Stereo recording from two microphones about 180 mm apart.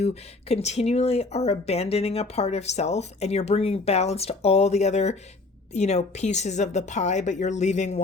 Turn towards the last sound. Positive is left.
turn(degrees=40)  # may be behind; listen again after turning